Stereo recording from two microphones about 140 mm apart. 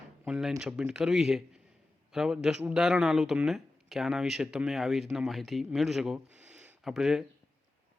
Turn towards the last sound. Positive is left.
turn(degrees=0)  # may be behind; listen again after turning